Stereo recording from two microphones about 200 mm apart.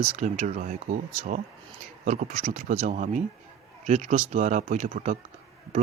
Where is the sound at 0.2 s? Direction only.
35° right (ahead or behind).